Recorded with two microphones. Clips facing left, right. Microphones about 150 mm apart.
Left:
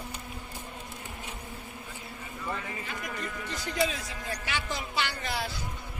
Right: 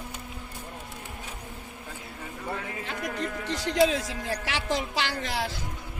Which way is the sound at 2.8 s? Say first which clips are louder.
Right 5 dB; 75° right (ahead or behind).